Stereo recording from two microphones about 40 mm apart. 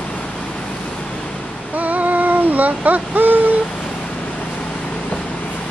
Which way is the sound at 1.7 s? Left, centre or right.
Right.